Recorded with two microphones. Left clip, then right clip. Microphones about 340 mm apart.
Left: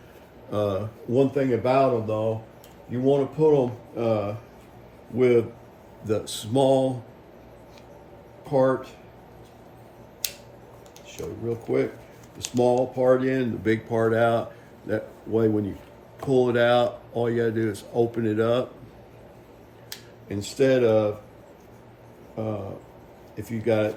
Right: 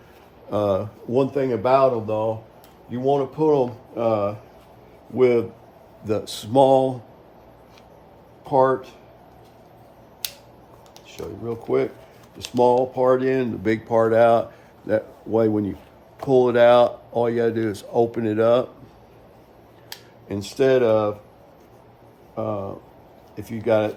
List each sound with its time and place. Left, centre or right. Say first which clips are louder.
0.5 s a man's voice: right 5 dB; centre
8.4 s a man's voice: right 4 dB; centre
10.2 s a sound: even; centre
11.1 s a man's voice: right 1 dB; centre
12.4 s speech: right 1 dB; centre
13.0 s speech: right 2 dB; centre
20.2 s a man's voice: right 2 dB; centre
22.4 s a man's voice: right 4 dB; centre